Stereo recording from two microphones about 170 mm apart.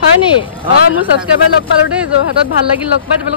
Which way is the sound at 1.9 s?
5° right (ahead or behind).